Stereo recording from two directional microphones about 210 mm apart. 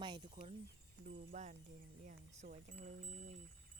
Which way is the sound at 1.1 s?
35° right (ahead or behind).